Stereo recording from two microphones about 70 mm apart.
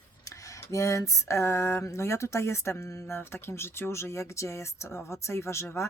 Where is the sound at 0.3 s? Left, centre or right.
Left.